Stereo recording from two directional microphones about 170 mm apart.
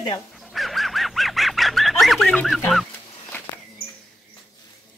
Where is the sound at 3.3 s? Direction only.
10° left (ahead or behind).